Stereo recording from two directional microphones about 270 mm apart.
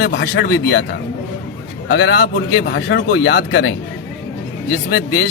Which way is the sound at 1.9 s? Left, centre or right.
Left.